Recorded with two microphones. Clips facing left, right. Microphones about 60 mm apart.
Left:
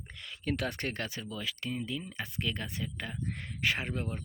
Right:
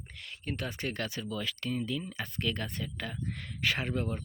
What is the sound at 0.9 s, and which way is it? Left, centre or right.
Speech, left.